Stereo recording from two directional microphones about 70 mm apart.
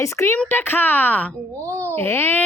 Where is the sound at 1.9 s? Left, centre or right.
Left.